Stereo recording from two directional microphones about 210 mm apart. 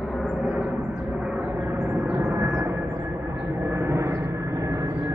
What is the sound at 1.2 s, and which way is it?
Vehicle, 5° right (ahead or behind).